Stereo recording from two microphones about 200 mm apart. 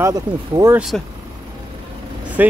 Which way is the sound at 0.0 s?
15° right (ahead or behind).